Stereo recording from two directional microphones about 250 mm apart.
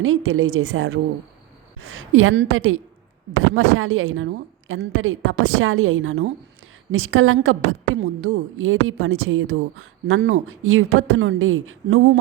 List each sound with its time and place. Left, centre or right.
0.0 s a woman's voice: right